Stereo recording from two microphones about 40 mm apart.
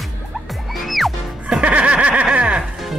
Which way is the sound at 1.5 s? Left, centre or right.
Right.